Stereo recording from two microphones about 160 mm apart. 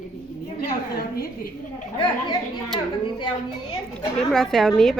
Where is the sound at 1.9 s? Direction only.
30° left (ahead or behind).